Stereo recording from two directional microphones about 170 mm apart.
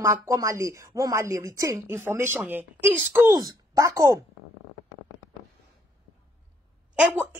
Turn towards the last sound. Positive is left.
turn(degrees=-10)  # may be behind; listen again after turning